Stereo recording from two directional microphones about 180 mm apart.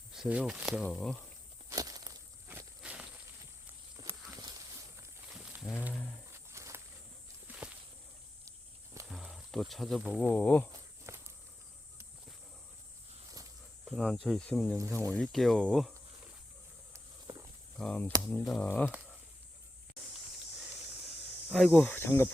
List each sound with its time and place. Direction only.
0.1 s speech: 5° right (ahead or behind)
1.7 s a sound: 20° right (ahead or behind)
3.9 s walk: 20° right (ahead or behind)
5.4 s a sound: 5° right (ahead or behind)
5.9 s wild animals: 5° left (ahead or behind)
6.3 s a sound: 15° right (ahead or behind)
7.4 s walk: 5° right (ahead or behind)
9.0 s snake: centre (ahead or behind)
10.2 s speech: 10° left (ahead or behind)
11.0 s walk: 15° right (ahead or behind)
13.8 s speech: 5° left (ahead or behind)
16.9 s walk: 20° right (ahead or behind)
17.7 s speech: 5° left (ahead or behind)
21.5 s speech: 5° left (ahead or behind)